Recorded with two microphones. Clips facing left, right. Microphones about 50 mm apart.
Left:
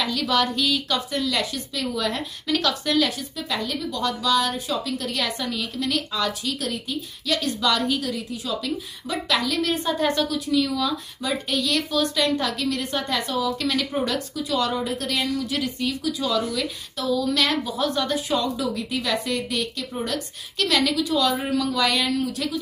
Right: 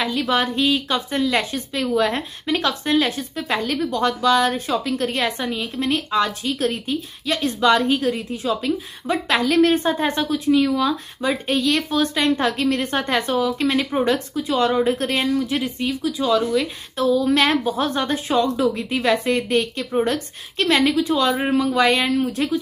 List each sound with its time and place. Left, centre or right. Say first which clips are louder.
0.0 s speech: right 2 dB; right